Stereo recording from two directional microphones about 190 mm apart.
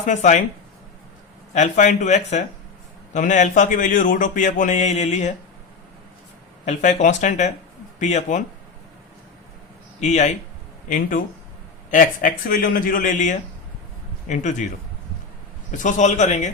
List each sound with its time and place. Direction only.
0.0 s a man's voice: 40° left (ahead or behind)
1.5 s a man's voice: 40° left (ahead or behind)
6.7 s a man's voice: 40° left (ahead or behind)
10.0 s a man's voice: 35° left (ahead or behind)
15.7 s a man's voice: 40° left (ahead or behind)